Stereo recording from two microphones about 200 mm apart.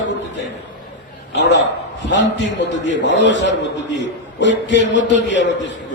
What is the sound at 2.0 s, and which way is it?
A man's voice, 65° left (ahead or behind).